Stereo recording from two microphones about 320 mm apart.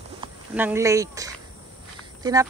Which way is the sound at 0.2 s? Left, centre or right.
Centre.